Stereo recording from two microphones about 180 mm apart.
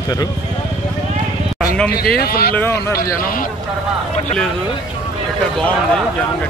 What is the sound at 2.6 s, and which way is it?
Speech, 15° left (ahead or behind).